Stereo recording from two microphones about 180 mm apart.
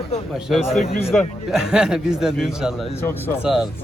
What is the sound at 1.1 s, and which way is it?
A man's voice, centre (ahead or behind).